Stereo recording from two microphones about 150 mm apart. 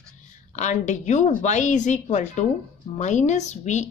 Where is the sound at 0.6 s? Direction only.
50° left (ahead or behind).